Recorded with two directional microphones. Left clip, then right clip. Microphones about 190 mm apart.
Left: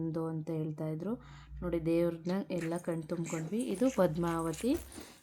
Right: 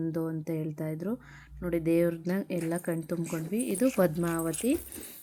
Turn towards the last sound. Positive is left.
turn(degrees=-15)  # may be behind; listen again after turning